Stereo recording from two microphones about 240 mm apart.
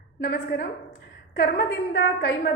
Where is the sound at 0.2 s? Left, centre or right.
Left.